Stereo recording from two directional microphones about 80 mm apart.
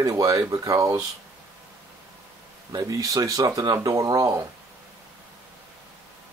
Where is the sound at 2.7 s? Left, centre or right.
Right.